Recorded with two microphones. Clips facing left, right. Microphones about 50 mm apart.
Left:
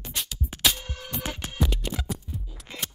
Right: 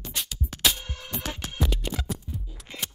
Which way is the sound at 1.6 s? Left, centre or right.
Centre.